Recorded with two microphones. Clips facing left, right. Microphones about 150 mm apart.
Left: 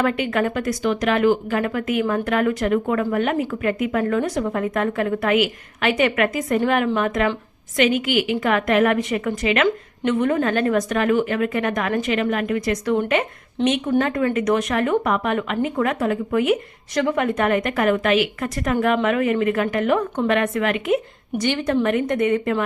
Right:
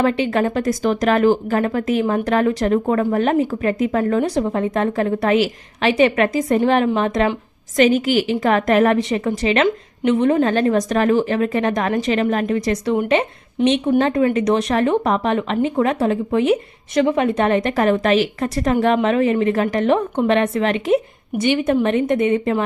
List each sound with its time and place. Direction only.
0.0 s a woman's voice: 30° right (ahead or behind)
21.4 s speech: 20° right (ahead or behind)